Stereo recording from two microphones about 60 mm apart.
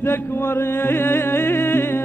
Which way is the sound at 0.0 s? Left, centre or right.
Left.